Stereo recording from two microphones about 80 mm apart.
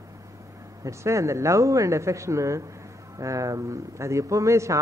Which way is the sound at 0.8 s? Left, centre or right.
Right.